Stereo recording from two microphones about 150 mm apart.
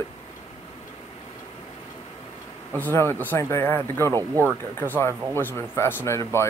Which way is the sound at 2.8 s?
15° left (ahead or behind).